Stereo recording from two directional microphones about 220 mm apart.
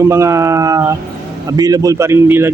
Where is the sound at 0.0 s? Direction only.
15° right (ahead or behind).